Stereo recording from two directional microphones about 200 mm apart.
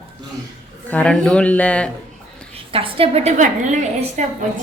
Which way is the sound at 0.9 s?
5° left (ahead or behind).